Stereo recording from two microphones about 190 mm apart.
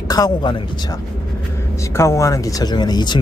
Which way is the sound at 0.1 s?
20° left (ahead or behind).